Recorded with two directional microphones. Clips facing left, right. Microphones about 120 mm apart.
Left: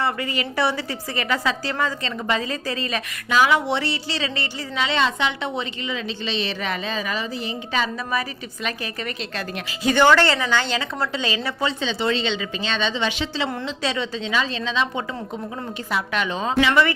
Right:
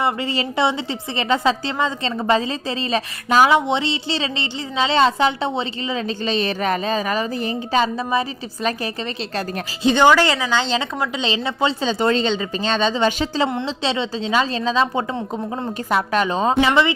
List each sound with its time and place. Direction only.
0.0 s a woman's voice: 25° right (ahead or behind)
3.7 s a woman's voice: 20° right (ahead or behind)
9.8 s speech: 20° right (ahead or behind)
11.8 s a woman's voice: 45° right (ahead or behind)
13.5 s a woman's voice: 25° right (ahead or behind)